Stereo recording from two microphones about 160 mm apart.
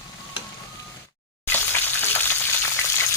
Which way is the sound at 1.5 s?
15° left (ahead or behind).